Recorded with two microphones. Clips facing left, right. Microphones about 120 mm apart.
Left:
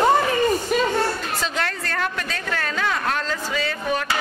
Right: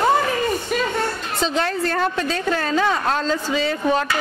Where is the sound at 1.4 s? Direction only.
30° right (ahead or behind).